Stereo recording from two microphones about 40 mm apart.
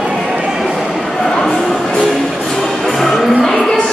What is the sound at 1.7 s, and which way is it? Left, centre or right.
Music, left.